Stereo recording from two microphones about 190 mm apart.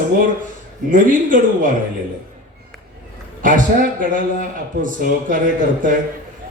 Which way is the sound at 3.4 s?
45° right (ahead or behind).